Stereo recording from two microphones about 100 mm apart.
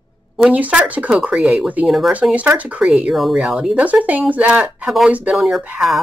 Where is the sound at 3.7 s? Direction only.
15° right (ahead or behind).